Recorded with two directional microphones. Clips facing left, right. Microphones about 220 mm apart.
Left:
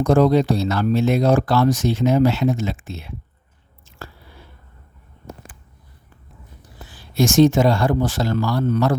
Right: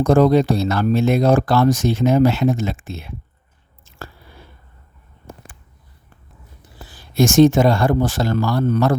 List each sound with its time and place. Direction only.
0.0 s speech: 50° right (ahead or behind)
6.8 s speech: 45° right (ahead or behind)